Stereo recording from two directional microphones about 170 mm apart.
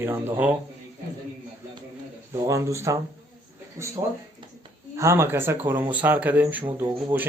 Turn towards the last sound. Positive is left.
turn(degrees=-15)  # may be behind; listen again after turning